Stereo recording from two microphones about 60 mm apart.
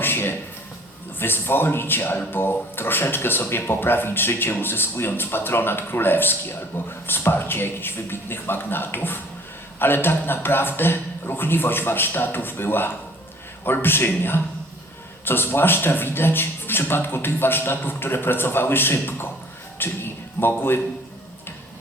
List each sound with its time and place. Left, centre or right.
0.0 s a sound: left
1.2 s speech: left
19.8 s music: left
20.6 s speech: left